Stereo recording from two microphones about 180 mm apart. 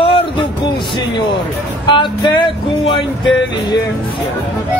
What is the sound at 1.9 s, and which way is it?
Speech, 25° left (ahead or behind).